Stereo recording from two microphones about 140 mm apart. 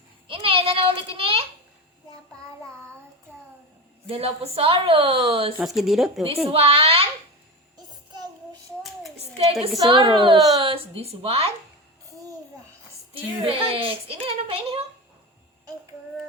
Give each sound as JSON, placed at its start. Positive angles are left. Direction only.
{"t": 0.3, "sound": "a child's voice", "side_deg": -40}
{"t": 4.1, "sound": "speech", "side_deg": -45}
{"t": 5.6, "sound": "speech", "side_deg": 0}
{"t": 6.2, "sound": "a woman's voice", "side_deg": -45}
{"t": 9.2, "sound": "a sound", "side_deg": -45}
{"t": 9.7, "sound": "a woman's voice", "side_deg": -30}
{"t": 13.1, "sound": "speech", "side_deg": -40}